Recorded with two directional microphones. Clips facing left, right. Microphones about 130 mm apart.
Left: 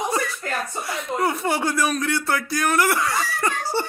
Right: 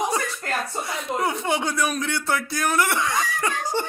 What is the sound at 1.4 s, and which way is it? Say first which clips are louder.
Speech: left 2 dB; 5° left (ahead or behind).